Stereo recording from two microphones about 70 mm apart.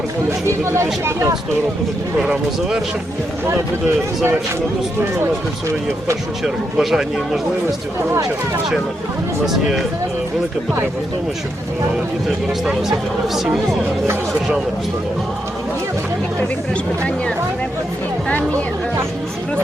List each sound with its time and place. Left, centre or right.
0.3 s speech: right
2.2 s speech: centre
6.4 s speech: centre
9.5 s speech: centre
13.2 s speech: centre